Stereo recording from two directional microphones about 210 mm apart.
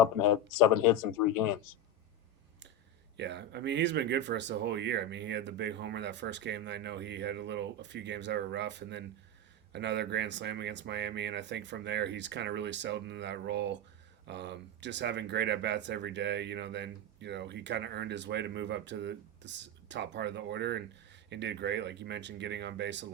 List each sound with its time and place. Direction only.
3.2 s speech: 55° right (ahead or behind)